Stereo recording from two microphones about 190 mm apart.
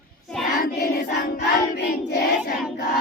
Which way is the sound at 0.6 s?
55° left (ahead or behind).